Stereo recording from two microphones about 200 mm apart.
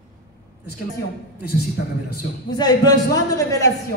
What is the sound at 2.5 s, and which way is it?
A man's voice, 20° left (ahead or behind).